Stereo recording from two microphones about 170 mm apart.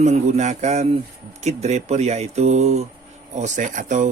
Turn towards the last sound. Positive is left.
turn(degrees=-50)  # may be behind; listen again after turning